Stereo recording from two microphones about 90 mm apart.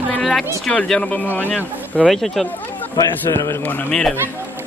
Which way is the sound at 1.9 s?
5° left (ahead or behind).